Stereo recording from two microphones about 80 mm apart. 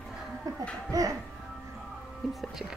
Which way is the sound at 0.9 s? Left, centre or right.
Right.